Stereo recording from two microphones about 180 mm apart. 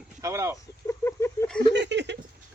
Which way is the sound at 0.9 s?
15° left (ahead or behind).